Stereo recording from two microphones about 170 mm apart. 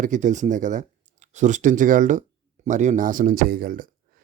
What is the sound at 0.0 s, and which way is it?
Speech, 45° right (ahead or behind).